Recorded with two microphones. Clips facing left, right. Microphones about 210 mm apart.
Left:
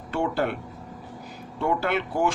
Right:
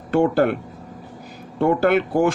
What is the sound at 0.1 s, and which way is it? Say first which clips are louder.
Speech: right 9 dB; 50° right (ahead or behind).